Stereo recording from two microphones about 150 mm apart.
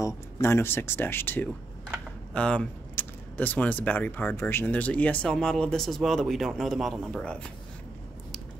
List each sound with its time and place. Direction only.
0.0 s speech: 20° left (ahead or behind)